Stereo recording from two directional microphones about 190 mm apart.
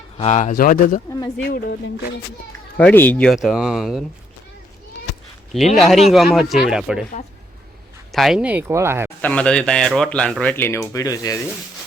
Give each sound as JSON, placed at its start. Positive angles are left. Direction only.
{"t": 0.2, "sound": "speech", "side_deg": 40}
{"t": 1.5, "sound": "speech", "side_deg": 55}
{"t": 2.7, "sound": "speech", "side_deg": 10}
{"t": 5.7, "sound": "speech", "side_deg": 0}
{"t": 8.1, "sound": "speech", "side_deg": 0}
{"t": 9.2, "sound": "speech", "side_deg": 5}